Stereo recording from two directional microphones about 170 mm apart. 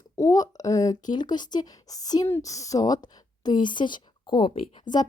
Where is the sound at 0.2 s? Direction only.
20° left (ahead or behind).